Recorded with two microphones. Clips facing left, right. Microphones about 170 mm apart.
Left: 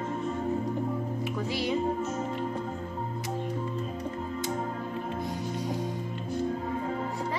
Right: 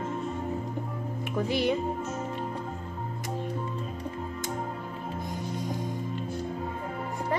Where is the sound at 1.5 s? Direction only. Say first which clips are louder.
Right 5 dB; 55° right (ahead or behind).